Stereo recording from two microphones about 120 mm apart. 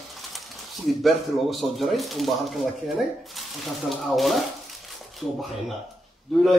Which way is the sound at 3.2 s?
Centre (ahead or behind).